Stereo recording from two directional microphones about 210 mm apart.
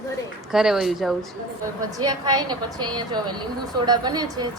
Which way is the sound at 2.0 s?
20° right (ahead or behind).